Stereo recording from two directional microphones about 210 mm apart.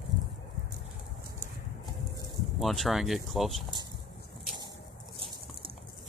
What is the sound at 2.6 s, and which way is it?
Speech, centre (ahead or behind).